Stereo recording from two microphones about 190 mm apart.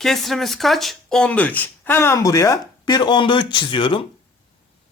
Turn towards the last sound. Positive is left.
turn(degrees=25)  # may be behind; listen again after turning